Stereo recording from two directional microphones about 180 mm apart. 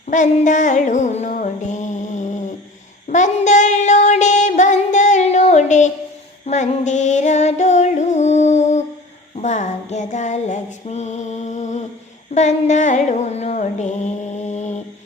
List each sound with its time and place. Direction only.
0.1 s music: 45° left (ahead or behind)
3.1 s child singing: 40° left (ahead or behind)
6.4 s music: 40° left (ahead or behind)